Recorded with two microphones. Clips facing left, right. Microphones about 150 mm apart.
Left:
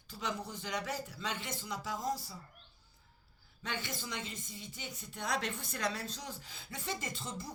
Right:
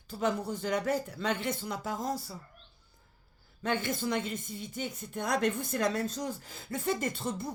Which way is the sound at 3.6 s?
55° right (ahead or behind).